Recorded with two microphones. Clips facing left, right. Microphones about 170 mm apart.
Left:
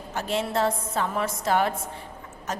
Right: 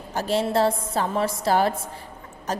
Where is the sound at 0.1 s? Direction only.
35° right (ahead or behind).